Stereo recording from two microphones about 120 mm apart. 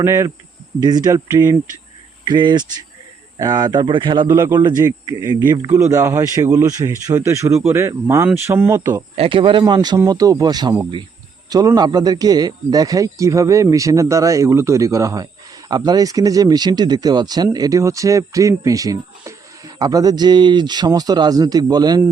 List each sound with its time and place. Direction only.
0.0 s speech: 25° right (ahead or behind); by 4.3 s 45° right (ahead or behind)
4.3 s speech: 25° right (ahead or behind)
9.1 s speech: 50° right (ahead or behind); by 22.0 s 35° right (ahead or behind)